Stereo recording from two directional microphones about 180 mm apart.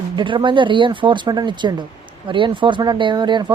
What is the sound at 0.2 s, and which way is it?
Speech, 25° right (ahead or behind).